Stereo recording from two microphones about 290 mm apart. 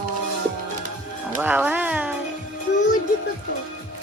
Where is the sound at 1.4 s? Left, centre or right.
Centre.